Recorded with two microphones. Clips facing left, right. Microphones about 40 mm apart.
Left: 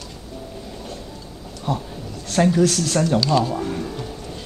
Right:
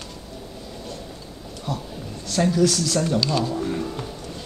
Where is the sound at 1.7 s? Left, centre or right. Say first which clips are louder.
Left 5 dB; left.